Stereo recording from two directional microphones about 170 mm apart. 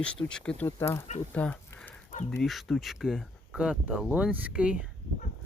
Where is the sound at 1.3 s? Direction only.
10° left (ahead or behind).